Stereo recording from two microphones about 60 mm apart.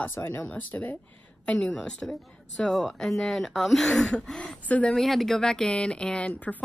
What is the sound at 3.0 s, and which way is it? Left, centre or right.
Speech, centre.